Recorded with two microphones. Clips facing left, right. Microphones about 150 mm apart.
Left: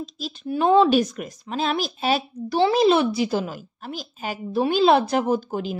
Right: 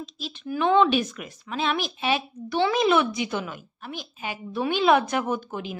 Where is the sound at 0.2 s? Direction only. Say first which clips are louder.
Left 3 dB; 40° left (ahead or behind).